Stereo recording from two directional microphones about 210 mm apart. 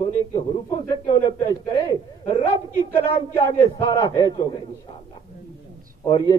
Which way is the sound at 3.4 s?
25° left (ahead or behind).